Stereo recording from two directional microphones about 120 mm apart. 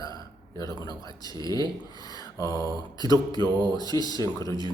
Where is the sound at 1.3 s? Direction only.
30° left (ahead or behind).